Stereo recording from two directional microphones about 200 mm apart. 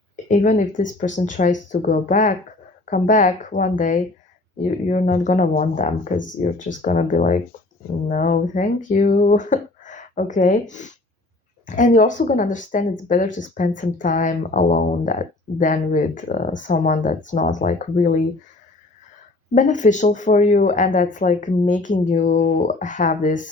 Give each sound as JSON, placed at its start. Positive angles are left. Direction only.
{"t": 0.3, "sound": "speech", "side_deg": 40}
{"t": 19.5, "sound": "speech", "side_deg": 40}